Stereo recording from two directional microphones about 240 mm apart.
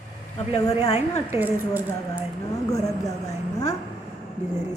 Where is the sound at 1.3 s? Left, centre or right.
Centre.